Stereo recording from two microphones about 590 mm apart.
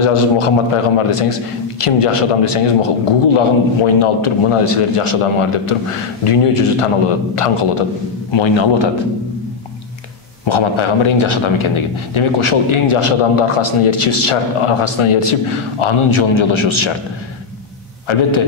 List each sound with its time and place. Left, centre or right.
0.0 s a man's voice: left
8.3 s a man's voice: left
10.4 s a man's voice: left